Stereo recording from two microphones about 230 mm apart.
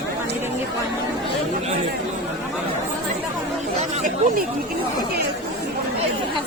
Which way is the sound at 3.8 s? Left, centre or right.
Right.